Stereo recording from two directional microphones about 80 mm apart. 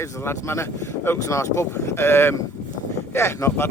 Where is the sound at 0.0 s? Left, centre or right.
Left.